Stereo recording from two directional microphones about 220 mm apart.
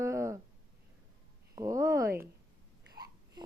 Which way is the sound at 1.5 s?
15° right (ahead or behind).